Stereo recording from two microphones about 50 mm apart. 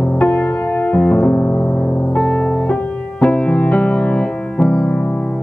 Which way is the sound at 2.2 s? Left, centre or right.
Centre.